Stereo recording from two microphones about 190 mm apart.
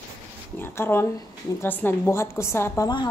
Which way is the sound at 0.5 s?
10° left (ahead or behind).